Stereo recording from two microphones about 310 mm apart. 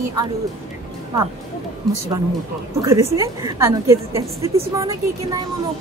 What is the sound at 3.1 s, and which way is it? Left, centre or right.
A woman's voice, centre.